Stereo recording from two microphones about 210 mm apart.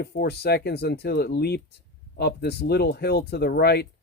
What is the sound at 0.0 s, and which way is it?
Speech, 50° left (ahead or behind).